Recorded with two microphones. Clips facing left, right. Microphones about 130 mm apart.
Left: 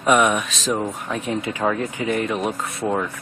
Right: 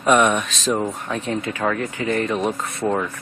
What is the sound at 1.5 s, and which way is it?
Speech, 15° left (ahead or behind).